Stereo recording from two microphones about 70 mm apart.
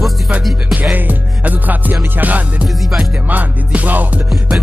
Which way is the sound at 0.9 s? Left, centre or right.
Right.